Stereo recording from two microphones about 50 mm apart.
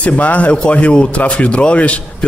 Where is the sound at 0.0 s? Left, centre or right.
Left.